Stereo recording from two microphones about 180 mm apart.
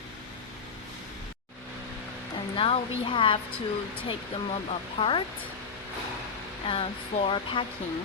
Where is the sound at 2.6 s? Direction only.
30° left (ahead or behind).